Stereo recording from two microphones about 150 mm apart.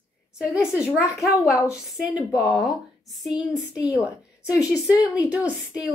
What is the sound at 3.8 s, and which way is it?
Speech, 25° left (ahead or behind).